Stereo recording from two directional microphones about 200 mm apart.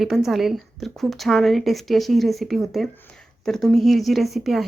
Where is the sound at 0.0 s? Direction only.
Centre (ahead or behind).